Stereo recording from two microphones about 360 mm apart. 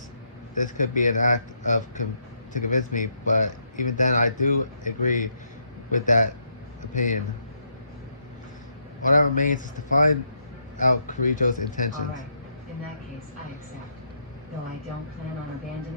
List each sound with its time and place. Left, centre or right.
0.6 s speech: left
9.0 s speech: left